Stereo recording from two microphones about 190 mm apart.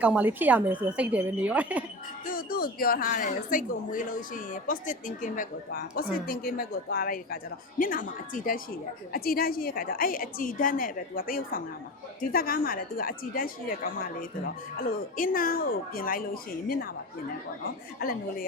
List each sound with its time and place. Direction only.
0.0 s a woman's voice: 10° right (ahead or behind)
2.2 s a woman's voice: 50° left (ahead or behind)
18.0 s a woman's voice: 50° left (ahead or behind)